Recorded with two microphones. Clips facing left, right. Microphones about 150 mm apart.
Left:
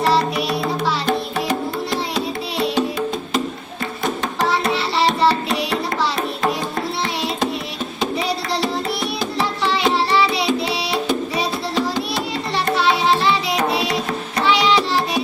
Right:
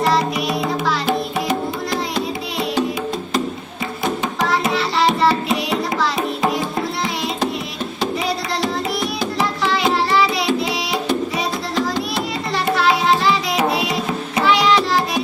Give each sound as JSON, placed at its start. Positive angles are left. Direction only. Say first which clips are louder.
{"t": 1.0, "sound": "music", "louder": "right 1 dB", "side_deg": -5}
{"t": 4.0, "sound": "music", "louder": "even", "side_deg": 0}
{"t": 8.6, "sound": "music", "louder": "right 1 dB", "side_deg": 0}
{"t": 10.2, "sound": "music", "louder": "right 1 dB", "side_deg": 30}
{"t": 12.6, "sound": "music", "louder": "right 1 dB", "side_deg": 0}
{"t": 13.8, "sound": "tabla", "louder": "right 1 dB", "side_deg": -5}